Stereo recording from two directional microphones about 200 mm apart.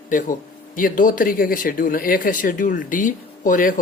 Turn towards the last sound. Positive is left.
turn(degrees=40)  # may be behind; listen again after turning